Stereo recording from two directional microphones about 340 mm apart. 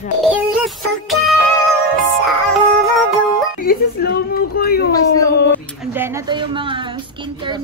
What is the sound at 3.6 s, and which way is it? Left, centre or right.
A woman's voice, left.